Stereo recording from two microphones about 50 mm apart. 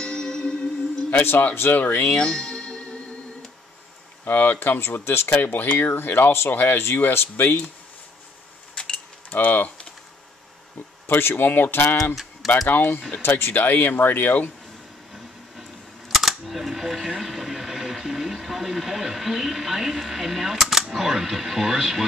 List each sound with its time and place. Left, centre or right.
0.0 s music: centre
1.2 s speech: left
1.8 s speech: left
2.0 s music: centre
4.2 s speech: left
8.7 s a sound: centre
9.3 s speech: left
11.1 s speech: left
16.1 s a sound: centre
20.7 s speech: centre